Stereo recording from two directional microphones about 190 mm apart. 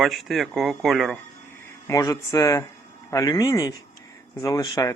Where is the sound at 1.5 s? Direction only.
15° left (ahead or behind).